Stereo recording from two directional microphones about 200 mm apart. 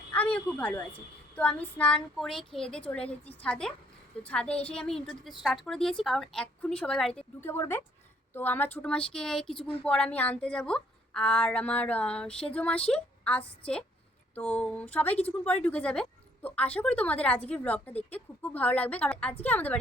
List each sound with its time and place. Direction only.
0.1 s a woman's voice: 5° left (ahead or behind)
9.6 s a woman's voice: 30° left (ahead or behind)
9.8 s a woman's voice: 5° left (ahead or behind)